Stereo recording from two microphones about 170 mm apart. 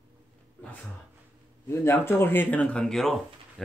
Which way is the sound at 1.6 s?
15° left (ahead or behind).